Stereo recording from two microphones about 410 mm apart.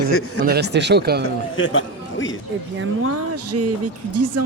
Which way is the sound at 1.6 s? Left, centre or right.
Left.